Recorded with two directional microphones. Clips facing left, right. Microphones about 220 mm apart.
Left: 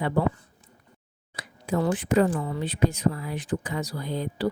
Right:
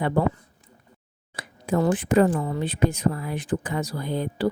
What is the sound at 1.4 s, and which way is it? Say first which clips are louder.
A woman's voice: right 3 dB; 55° right (ahead or behind).